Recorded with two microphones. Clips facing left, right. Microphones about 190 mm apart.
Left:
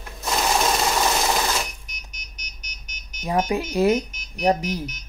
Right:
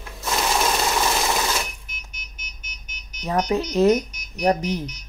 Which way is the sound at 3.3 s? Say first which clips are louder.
Right 1 dB; 10° left (ahead or behind).